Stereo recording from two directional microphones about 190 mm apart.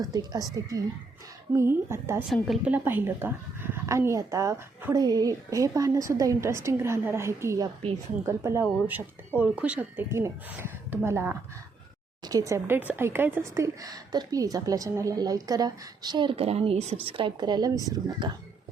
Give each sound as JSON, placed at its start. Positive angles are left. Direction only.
{"t": 0.0, "sound": "speech", "side_deg": -20}
{"t": 1.5, "sound": "a woman's voice", "side_deg": -15}